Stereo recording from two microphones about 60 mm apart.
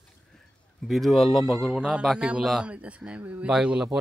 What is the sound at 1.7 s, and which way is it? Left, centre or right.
Speech, centre.